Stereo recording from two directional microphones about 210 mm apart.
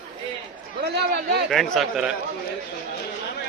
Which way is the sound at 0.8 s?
50° right (ahead or behind).